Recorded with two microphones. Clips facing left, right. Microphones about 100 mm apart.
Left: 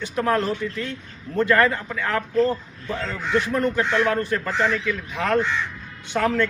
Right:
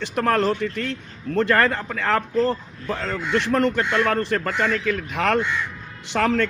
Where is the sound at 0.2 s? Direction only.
75° right (ahead or behind).